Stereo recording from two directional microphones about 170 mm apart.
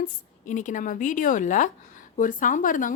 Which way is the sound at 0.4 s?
45° left (ahead or behind).